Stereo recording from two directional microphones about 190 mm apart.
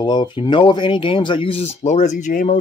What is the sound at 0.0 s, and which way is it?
Speech, 25° left (ahead or behind).